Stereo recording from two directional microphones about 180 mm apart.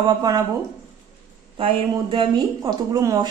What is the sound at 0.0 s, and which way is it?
Speech, 20° right (ahead or behind).